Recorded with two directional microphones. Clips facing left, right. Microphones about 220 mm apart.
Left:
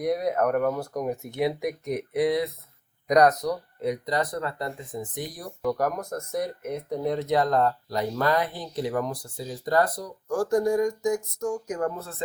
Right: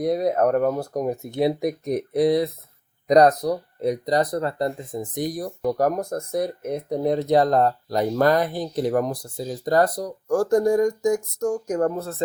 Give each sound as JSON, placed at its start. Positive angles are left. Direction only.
{"t": 0.0, "sound": "speech", "side_deg": -30}